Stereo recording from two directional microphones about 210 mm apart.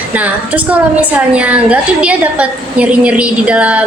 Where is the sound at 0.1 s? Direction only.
5° right (ahead or behind).